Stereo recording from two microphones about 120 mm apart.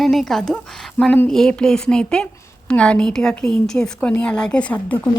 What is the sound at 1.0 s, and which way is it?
A woman's voice, 15° left (ahead or behind).